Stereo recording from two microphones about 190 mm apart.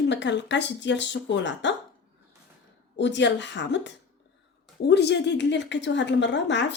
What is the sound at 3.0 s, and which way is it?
A woman's voice, 70° left (ahead or behind).